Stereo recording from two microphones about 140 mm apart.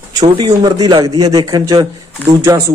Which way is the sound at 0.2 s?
30° right (ahead or behind).